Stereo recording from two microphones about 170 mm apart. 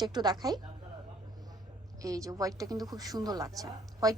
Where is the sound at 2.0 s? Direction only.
20° right (ahead or behind).